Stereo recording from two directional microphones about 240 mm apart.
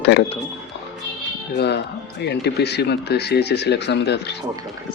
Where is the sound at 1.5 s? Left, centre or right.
Left.